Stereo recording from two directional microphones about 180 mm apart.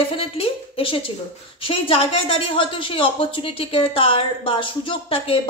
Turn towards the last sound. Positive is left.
turn(degrees=30)  # may be behind; listen again after turning